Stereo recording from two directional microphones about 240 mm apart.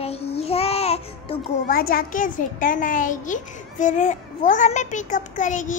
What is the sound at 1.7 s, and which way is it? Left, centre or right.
A child's voice, left.